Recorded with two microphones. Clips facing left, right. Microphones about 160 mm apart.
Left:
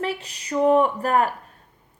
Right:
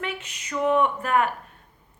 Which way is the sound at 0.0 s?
35° left (ahead or behind).